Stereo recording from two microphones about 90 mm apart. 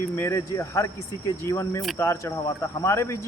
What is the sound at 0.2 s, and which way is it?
Speech, 35° left (ahead or behind).